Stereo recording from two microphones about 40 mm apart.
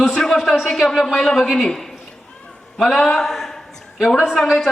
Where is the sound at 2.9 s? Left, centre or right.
Centre.